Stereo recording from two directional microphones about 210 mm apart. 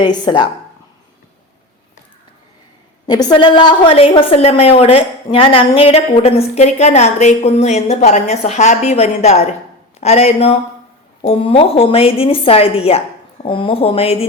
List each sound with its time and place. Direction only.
0.0 s a woman's voice: 20° left (ahead or behind)
3.1 s a woman's voice: 20° left (ahead or behind)